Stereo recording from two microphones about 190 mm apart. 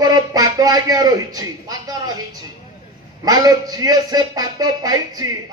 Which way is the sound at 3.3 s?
20° right (ahead or behind).